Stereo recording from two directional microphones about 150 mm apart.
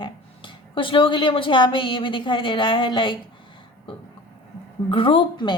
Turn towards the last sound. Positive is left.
turn(degrees=35)  # may be behind; listen again after turning